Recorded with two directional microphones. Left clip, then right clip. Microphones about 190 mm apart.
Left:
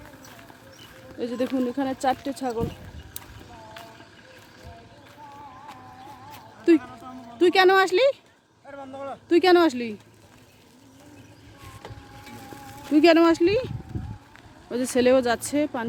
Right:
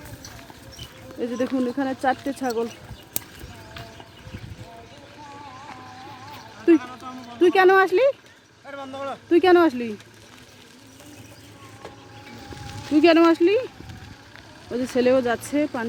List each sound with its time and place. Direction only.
1.2 s speech: 5° left (ahead or behind)
6.7 s a sound: 5° left (ahead or behind)
7.3 s speech: 10° left (ahead or behind)
12.3 s music: 50° left (ahead or behind)
12.9 s speech: 15° left (ahead or behind)
14.7 s speech: 20° left (ahead or behind)
15.4 s speech: 5° left (ahead or behind)